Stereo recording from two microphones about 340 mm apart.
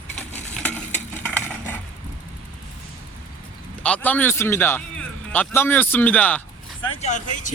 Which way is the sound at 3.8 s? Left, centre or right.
Centre.